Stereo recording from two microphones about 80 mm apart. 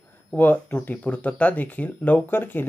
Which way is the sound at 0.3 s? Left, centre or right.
Left.